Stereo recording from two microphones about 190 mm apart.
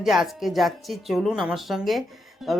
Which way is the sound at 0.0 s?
Centre (ahead or behind).